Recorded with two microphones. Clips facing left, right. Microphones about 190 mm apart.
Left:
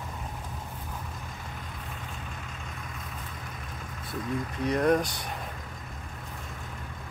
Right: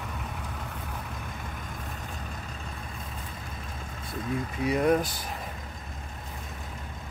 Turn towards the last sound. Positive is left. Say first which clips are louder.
# even
turn(degrees=-5)  # may be behind; listen again after turning